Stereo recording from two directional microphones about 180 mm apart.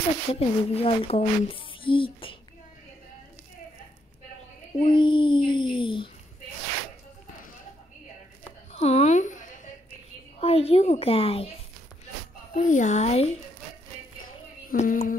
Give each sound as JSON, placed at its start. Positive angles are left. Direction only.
{"t": 0.3, "sound": "speech", "side_deg": 30}
{"t": 4.7, "sound": "speech", "side_deg": 30}
{"t": 8.7, "sound": "speech", "side_deg": 35}
{"t": 10.4, "sound": "a woman's voice", "side_deg": 35}
{"t": 12.5, "sound": "a woman's voice", "side_deg": 45}
{"t": 14.7, "sound": "a sound", "side_deg": 45}